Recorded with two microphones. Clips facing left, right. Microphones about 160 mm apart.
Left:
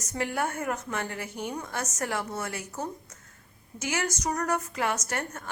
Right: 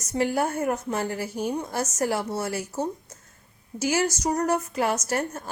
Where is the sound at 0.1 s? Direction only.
30° right (ahead or behind).